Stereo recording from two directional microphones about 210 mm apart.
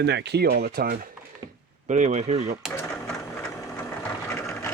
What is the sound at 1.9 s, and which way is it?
Speech, 35° right (ahead or behind).